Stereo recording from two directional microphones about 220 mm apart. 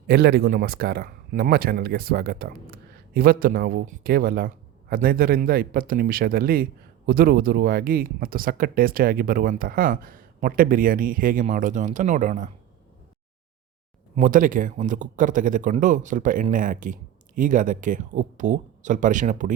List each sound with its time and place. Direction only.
0.1 s speech: 45° right (ahead or behind)
14.2 s speech: 35° right (ahead or behind)